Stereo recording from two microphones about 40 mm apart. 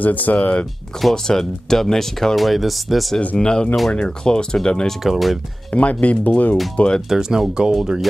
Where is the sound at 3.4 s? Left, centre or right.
Centre.